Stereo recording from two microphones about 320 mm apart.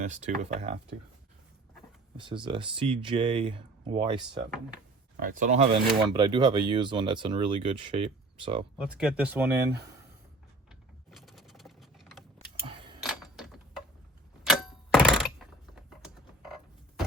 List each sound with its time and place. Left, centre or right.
0.0 s speech: right
2.1 s speech: centre
5.2 s speech: right
8.8 s speech: centre
10.7 s sewing machine: centre
12.6 s a sound: centre
13.0 s a sound: centre
14.4 s typewriter: centre